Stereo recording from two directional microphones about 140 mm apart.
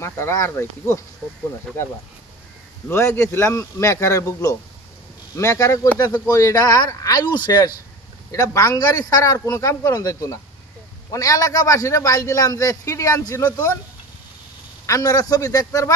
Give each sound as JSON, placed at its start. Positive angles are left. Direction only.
{"t": 0.0, "sound": "speech", "side_deg": 20}
{"t": 2.9, "sound": "speech", "side_deg": 20}
{"t": 14.9, "sound": "speech", "side_deg": 25}